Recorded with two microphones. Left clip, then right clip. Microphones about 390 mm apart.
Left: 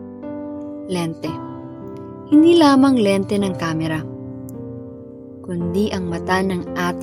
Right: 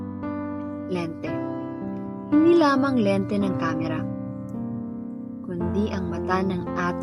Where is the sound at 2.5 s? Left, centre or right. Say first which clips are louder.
Left 5 dB; left.